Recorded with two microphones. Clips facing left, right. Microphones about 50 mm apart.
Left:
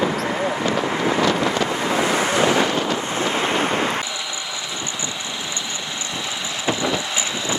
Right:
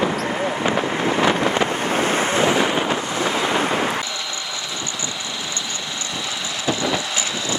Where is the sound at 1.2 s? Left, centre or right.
Right.